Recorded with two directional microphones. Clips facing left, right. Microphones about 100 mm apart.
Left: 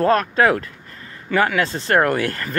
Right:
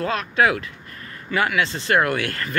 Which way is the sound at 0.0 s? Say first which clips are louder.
Left 5 dB; 45° left (ahead or behind).